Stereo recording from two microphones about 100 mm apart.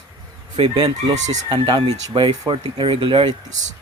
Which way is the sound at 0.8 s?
45° right (ahead or behind).